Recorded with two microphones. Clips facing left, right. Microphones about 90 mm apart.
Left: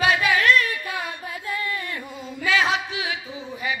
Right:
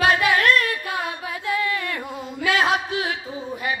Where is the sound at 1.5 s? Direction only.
80° right.